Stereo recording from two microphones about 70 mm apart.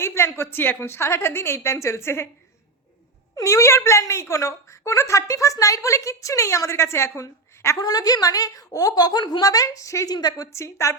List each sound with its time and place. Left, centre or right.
0.0 s a woman's voice: left
3.3 s a woman's voice: left
7.8 s a woman's voice: left
10.1 s a woman's voice: left